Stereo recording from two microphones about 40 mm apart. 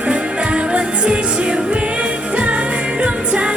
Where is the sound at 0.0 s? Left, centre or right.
Right.